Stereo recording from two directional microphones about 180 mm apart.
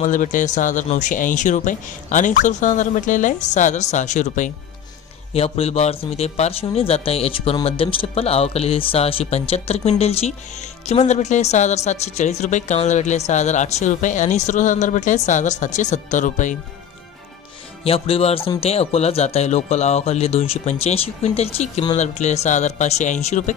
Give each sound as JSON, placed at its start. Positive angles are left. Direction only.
{"t": 0.0, "sound": "a woman's voice", "side_deg": 45}
{"t": 17.8, "sound": "a woman's voice", "side_deg": 30}